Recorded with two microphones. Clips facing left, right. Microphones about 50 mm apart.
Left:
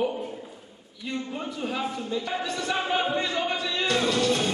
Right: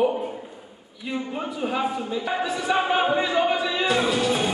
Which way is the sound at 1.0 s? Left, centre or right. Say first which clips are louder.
Right 3 dB; centre.